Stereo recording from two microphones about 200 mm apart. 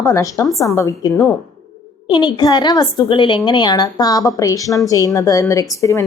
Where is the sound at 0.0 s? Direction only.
15° left (ahead or behind).